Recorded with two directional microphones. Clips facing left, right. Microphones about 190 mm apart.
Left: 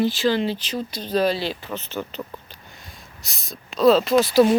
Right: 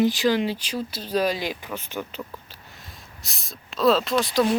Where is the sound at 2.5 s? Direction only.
Centre (ahead or behind).